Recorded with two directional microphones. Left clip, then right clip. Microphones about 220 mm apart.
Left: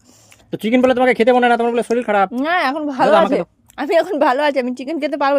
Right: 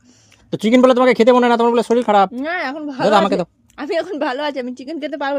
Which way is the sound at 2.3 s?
30° left (ahead or behind).